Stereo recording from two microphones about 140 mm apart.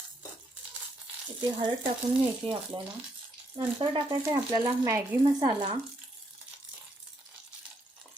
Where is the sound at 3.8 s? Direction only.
35° right (ahead or behind).